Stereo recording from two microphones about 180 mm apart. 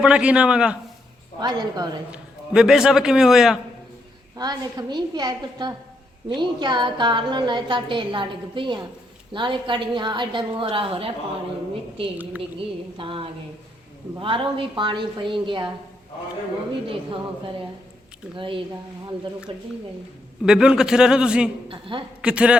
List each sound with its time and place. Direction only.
0.0 s a man's voice: 5° right (ahead or behind)
1.4 s a woman's voice: 25° right (ahead or behind)
2.0 s a man's voice: 5° right (ahead or behind)
4.4 s a woman's voice: 25° right (ahead or behind)
12.1 s speech: 10° right (ahead or behind)
12.4 s a woman's voice: 30° right (ahead or behind)
18.3 s a woman's voice: 30° right (ahead or behind)
20.4 s a man's voice: 5° right (ahead or behind)
21.7 s a woman's voice: 30° right (ahead or behind)
22.2 s a man's voice: 5° right (ahead or behind)